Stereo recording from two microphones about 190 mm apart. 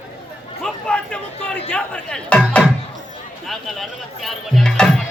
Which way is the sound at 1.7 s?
5° left (ahead or behind).